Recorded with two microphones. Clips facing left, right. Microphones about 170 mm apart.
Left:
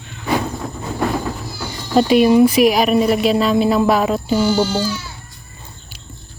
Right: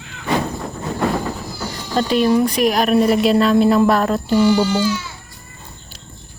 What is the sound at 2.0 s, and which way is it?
Speech, 10° left (ahead or behind).